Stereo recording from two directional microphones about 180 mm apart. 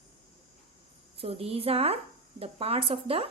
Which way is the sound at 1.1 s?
30° right (ahead or behind).